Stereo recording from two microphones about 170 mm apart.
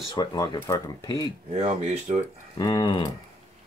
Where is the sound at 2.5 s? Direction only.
20° left (ahead or behind).